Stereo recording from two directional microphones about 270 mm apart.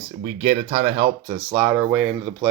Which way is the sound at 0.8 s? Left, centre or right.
Right.